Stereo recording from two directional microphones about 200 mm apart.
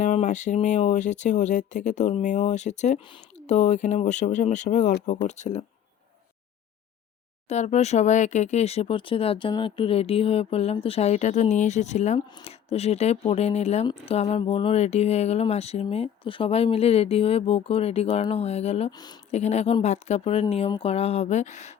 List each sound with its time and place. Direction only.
0.0 s speech: 35° left (ahead or behind)
7.4 s speech: 35° left (ahead or behind)
12.3 s speech: 20° left (ahead or behind)
12.6 s speech: 30° left (ahead or behind)
18.9 s speech: 20° left (ahead or behind)
19.3 s speech: 35° left (ahead or behind)